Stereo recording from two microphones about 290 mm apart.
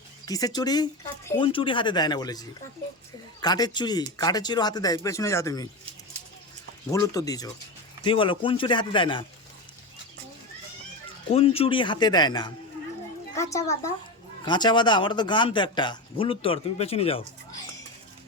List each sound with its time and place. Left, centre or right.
0.3 s a man's voice: centre
6.9 s a man's voice: centre
11.3 s a man's voice: centre